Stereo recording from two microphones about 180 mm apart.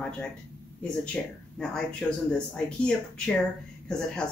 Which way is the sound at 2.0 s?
5° left (ahead or behind).